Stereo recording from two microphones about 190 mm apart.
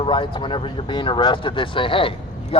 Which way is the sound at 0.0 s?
25° left (ahead or behind).